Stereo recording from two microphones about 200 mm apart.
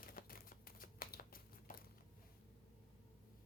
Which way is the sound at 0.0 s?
45° left (ahead or behind).